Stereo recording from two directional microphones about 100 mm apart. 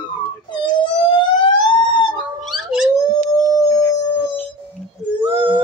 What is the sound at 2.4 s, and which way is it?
Dog, centre (ahead or behind).